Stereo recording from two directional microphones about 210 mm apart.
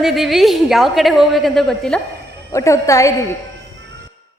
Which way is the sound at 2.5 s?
15° left (ahead or behind).